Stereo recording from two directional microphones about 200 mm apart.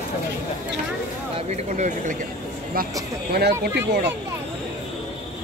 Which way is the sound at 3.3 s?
55° right (ahead or behind).